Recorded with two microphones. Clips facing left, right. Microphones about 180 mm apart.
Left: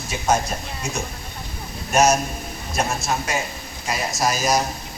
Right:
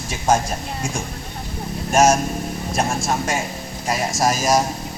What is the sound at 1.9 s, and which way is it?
Speech, 50° right (ahead or behind).